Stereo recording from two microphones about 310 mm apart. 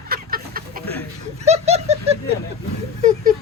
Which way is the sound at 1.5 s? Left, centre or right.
Centre.